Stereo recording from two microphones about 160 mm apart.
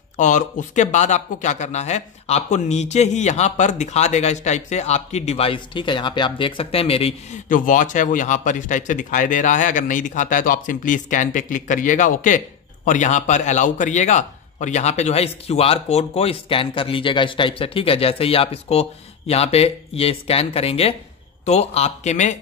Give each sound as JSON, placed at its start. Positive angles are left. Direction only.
{"t": 0.2, "sound": "speech", "side_deg": 50}
{"t": 7.4, "sound": "a man's voice", "side_deg": 55}